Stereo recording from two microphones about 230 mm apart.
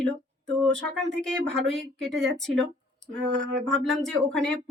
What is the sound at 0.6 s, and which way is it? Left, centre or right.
Speech, centre.